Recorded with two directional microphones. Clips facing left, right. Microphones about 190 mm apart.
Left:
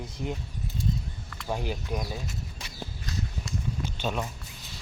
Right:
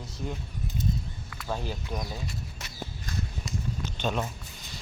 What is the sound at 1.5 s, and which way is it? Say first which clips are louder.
Speech: left 2 dB; 15° left (ahead or behind).